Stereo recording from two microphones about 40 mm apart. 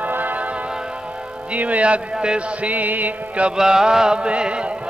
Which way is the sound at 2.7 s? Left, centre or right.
Right.